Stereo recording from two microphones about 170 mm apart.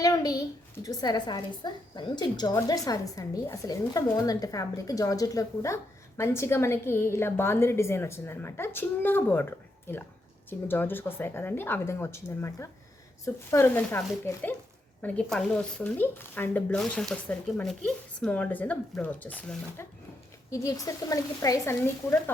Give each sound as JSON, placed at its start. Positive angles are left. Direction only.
{"t": 0.0, "sound": "a woman's voice", "side_deg": 20}
{"t": 15.0, "sound": "a woman's voice", "side_deg": 5}
{"t": 20.5, "sound": "a woman's voice", "side_deg": 20}